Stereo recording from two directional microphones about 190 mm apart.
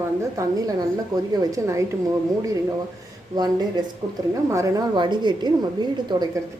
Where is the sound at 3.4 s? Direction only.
20° right (ahead or behind).